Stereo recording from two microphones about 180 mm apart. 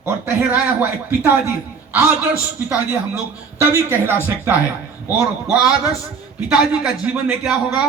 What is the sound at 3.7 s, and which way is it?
A man's voice, 10° right (ahead or behind).